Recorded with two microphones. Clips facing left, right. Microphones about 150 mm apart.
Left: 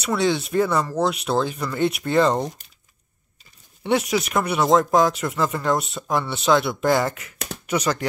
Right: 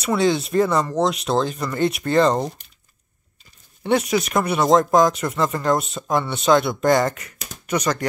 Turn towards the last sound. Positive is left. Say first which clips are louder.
# right 1 dB
turn(degrees=10)  # may be behind; listen again after turning